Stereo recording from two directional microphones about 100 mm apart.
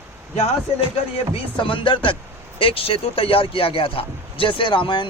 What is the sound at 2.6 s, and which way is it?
A man's voice, 70° left (ahead or behind).